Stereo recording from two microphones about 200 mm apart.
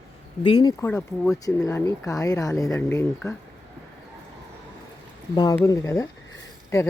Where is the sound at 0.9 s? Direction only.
5° left (ahead or behind).